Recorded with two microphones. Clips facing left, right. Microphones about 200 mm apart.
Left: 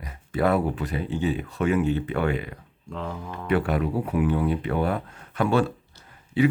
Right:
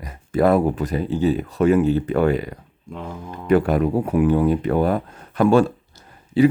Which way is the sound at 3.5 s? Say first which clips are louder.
Right 7 dB; 40° right (ahead or behind).